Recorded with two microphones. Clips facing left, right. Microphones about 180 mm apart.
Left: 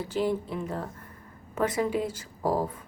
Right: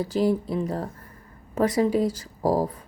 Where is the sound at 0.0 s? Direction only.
40° right (ahead or behind).